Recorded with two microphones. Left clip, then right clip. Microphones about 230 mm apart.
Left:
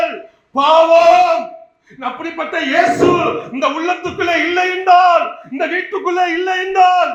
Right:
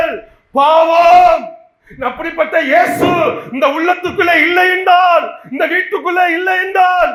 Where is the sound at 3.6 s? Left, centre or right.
Right.